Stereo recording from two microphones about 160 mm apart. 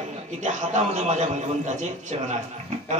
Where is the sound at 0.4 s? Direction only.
45° right (ahead or behind).